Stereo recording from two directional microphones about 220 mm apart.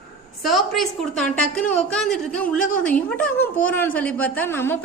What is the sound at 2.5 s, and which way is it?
Speech, 35° left (ahead or behind).